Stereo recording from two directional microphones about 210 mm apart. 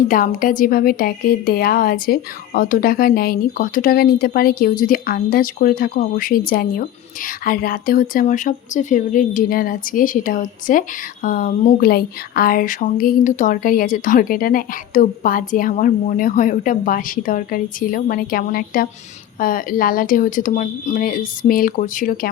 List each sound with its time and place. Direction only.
0.1 s a woman's voice: 40° left (ahead or behind)